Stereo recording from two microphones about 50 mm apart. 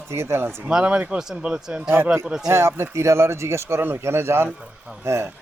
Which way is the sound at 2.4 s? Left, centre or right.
Right.